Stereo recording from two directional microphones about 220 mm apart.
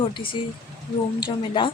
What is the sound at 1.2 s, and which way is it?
Speech, 20° left (ahead or behind).